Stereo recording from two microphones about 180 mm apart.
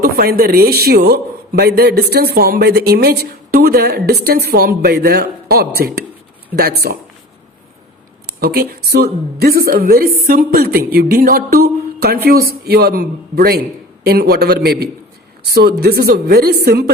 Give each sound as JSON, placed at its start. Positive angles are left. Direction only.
{"t": 0.0, "sound": "speech", "side_deg": -55}
{"t": 8.4, "sound": "speech", "side_deg": -60}